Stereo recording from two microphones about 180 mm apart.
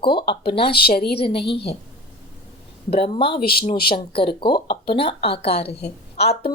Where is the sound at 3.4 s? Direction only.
60° left (ahead or behind).